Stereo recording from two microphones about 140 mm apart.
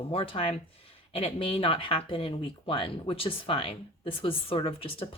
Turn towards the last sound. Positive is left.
turn(degrees=40)  # may be behind; listen again after turning